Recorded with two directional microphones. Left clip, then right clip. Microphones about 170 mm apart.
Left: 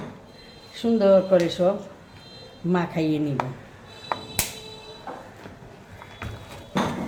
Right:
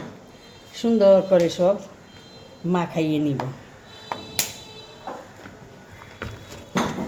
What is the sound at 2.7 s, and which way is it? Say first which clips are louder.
Speech: right 1 dB; 30° right (ahead or behind).